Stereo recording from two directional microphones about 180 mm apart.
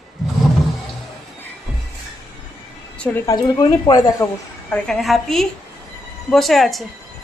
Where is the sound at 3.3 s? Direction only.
25° left (ahead or behind).